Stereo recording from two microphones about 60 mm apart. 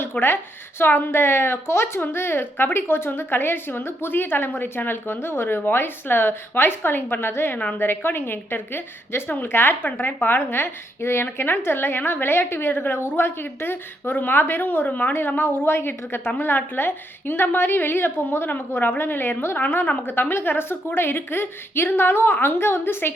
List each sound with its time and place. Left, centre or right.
0.0 s a woman's voice: left
10.3 s a woman's voice: left
15.1 s a woman's voice: left
19.6 s a woman's voice: left